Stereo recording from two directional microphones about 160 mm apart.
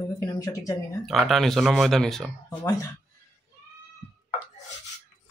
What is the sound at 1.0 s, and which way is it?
Speech, centre (ahead or behind).